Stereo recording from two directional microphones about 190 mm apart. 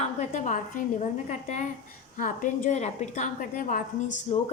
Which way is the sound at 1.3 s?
40° left (ahead or behind).